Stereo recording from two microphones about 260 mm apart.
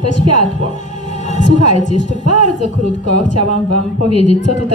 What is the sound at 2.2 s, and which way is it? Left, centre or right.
Speech, right.